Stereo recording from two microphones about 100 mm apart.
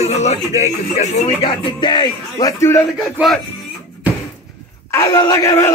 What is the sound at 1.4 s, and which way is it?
Music, 50° left (ahead or behind).